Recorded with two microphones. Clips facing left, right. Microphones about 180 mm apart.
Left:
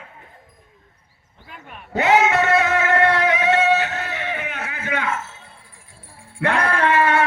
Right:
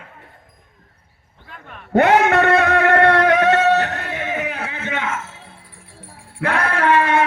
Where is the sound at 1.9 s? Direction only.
60° right (ahead or behind); by 5.1 s 25° right (ahead or behind).